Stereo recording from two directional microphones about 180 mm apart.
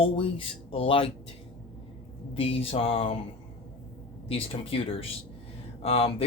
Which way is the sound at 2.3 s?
30° left (ahead or behind).